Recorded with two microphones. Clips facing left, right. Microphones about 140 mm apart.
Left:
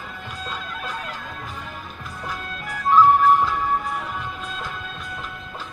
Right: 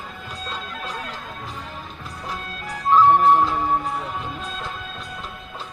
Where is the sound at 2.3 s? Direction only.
35° right (ahead or behind).